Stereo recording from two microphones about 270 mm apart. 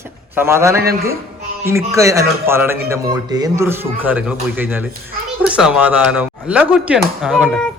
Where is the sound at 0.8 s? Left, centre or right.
Right.